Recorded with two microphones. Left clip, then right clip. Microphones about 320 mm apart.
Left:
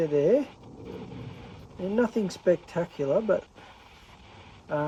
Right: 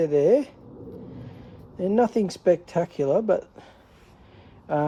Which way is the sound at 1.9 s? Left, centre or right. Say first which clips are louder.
Right 5 dB; right.